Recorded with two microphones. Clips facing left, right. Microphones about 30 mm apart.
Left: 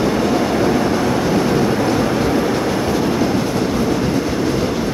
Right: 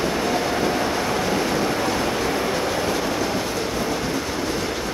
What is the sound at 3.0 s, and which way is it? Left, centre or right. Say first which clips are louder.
Train: left 6 dB; centre.